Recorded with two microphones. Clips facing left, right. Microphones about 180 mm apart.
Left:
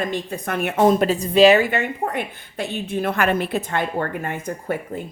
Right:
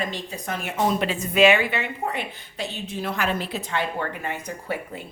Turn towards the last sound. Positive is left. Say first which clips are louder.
# left 4 dB
turn(degrees=50)  # may be behind; listen again after turning